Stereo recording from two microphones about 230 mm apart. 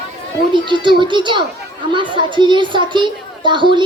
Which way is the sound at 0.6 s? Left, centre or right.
Right.